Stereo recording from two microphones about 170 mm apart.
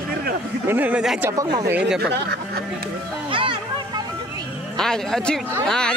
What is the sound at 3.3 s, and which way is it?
Music, 30° right (ahead or behind).